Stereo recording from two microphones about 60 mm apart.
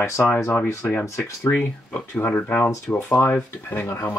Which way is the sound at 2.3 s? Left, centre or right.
Centre.